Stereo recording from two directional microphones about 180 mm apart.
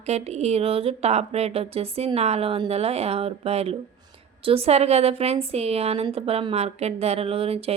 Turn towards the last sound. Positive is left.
turn(degrees=-35)  # may be behind; listen again after turning